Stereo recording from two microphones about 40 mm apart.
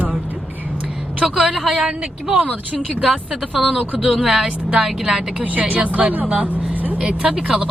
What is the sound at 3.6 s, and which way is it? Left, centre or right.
Speech, centre.